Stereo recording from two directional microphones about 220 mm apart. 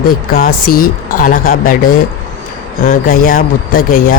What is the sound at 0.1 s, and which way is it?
Speech, 40° left (ahead or behind).